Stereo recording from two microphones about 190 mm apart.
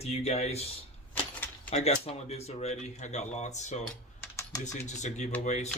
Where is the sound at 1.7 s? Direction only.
35° left (ahead or behind).